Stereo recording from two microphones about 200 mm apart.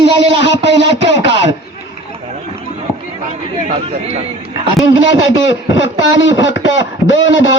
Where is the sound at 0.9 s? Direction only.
65° left (ahead or behind).